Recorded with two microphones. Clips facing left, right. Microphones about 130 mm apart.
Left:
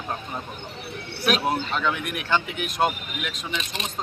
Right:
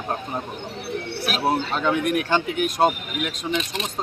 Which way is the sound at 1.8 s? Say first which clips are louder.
Right 6 dB; 40° right (ahead or behind).